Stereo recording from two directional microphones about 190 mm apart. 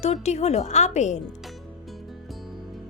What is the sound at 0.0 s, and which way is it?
Speech, 35° left (ahead or behind).